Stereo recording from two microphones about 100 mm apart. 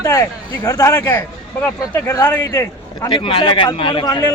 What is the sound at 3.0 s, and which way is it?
Speech, 55° left (ahead or behind).